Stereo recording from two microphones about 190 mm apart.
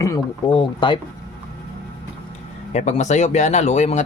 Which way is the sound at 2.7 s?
35° left (ahead or behind).